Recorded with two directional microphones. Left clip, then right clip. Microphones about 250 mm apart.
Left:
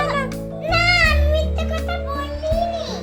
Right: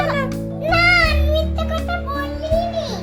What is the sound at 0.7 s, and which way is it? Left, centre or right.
Music, centre.